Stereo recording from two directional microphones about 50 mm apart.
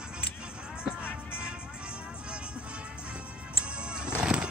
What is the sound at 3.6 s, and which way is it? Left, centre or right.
Music, centre.